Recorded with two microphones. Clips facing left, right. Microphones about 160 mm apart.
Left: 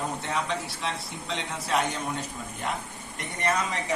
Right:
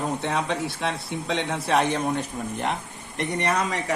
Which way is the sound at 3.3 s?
70° right (ahead or behind).